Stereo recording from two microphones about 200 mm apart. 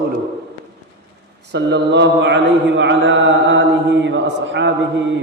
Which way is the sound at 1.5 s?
60° right (ahead or behind).